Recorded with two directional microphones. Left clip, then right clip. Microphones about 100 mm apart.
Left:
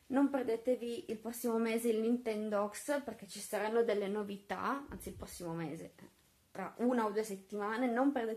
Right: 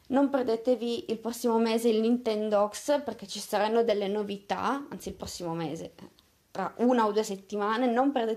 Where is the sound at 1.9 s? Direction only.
25° right (ahead or behind).